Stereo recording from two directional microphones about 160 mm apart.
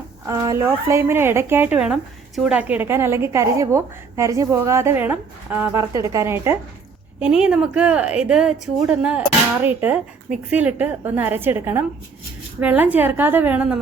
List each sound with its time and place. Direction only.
0.3 s speech: 20° right (ahead or behind)
7.2 s speech: 5° right (ahead or behind)